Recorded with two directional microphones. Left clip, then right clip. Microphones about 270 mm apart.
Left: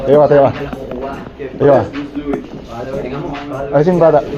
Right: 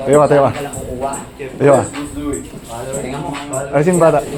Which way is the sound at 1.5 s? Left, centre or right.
Right.